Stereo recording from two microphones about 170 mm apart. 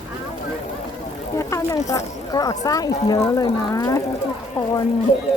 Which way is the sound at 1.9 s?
20° left (ahead or behind).